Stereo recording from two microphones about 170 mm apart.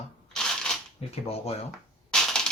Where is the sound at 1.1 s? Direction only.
35° left (ahead or behind).